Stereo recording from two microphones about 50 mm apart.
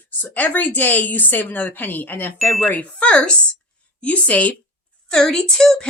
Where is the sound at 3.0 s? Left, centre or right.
Left.